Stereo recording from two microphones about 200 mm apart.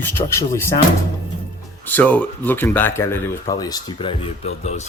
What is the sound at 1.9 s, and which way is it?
Speech, 10° left (ahead or behind).